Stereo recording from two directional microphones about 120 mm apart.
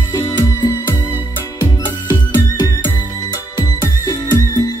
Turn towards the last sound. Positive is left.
turn(degrees=35)  # may be behind; listen again after turning